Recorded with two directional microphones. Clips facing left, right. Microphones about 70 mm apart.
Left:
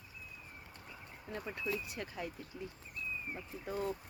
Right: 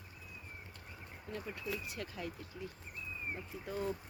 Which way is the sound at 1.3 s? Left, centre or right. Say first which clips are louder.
Left 2 dB; centre.